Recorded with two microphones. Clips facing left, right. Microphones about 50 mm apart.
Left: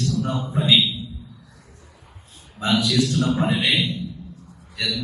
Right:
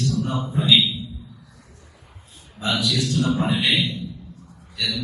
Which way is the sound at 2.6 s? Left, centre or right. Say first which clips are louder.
Left 3 dB; left.